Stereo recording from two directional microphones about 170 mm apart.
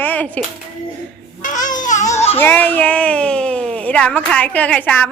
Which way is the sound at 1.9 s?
45° left (ahead or behind).